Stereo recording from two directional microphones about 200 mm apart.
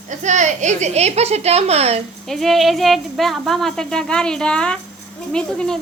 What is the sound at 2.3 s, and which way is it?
A woman's voice, centre (ahead or behind).